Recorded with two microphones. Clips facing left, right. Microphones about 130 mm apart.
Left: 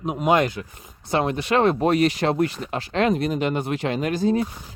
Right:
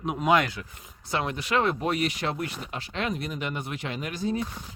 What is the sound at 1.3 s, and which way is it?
Speech, 60° left (ahead or behind).